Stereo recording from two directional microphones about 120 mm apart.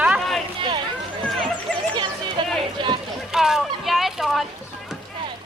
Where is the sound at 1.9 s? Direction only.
40° right (ahead or behind).